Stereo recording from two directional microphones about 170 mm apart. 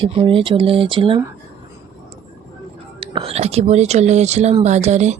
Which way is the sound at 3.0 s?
35° right (ahead or behind).